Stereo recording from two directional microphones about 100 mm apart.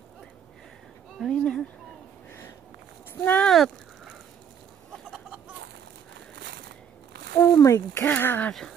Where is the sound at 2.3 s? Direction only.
25° left (ahead or behind).